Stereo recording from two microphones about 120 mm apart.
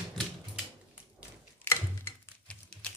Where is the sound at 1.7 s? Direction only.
20° left (ahead or behind).